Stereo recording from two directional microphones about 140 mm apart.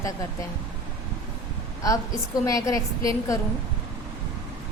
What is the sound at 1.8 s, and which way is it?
A woman's voice, 25° left (ahead or behind).